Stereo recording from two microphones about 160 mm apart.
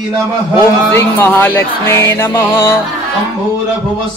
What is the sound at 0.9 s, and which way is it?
Music, 15° left (ahead or behind).